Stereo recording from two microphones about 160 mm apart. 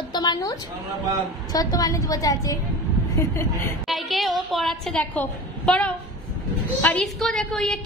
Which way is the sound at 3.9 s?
Centre (ahead or behind).